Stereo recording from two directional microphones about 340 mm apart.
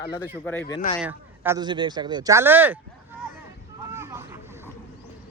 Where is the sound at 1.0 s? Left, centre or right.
Centre.